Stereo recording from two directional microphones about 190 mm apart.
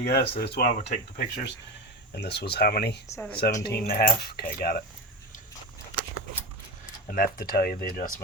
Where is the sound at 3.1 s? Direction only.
10° left (ahead or behind).